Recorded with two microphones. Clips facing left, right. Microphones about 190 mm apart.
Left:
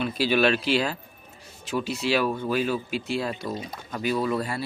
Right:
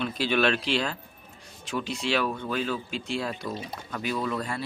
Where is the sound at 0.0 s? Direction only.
5° left (ahead or behind).